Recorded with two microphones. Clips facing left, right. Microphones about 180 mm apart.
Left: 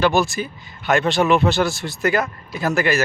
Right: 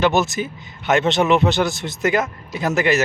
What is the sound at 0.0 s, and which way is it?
Speech, 20° right (ahead or behind).